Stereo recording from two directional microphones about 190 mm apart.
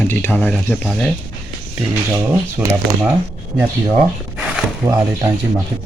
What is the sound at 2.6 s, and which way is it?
Speech, 15° right (ahead or behind).